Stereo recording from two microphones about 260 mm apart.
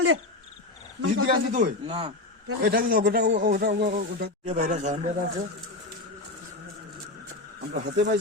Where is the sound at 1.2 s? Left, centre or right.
Right.